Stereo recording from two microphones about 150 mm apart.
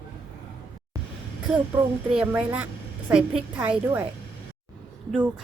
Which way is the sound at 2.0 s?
5° right (ahead or behind).